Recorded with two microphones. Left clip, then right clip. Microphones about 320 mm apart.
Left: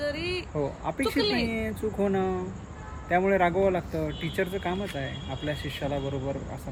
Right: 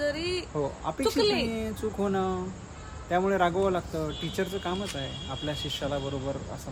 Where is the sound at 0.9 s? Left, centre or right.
Centre.